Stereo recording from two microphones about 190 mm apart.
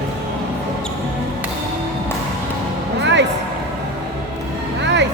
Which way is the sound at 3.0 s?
65° right (ahead or behind).